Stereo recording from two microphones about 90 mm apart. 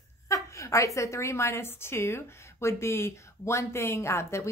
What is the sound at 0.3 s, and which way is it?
A woman's voice, 35° left (ahead or behind).